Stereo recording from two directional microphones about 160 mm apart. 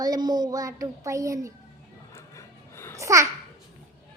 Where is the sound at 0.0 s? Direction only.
25° right (ahead or behind).